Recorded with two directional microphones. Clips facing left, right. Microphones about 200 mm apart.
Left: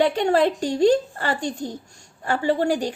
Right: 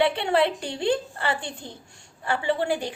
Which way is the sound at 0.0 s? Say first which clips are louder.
Left 3 dB; 45° left (ahead or behind).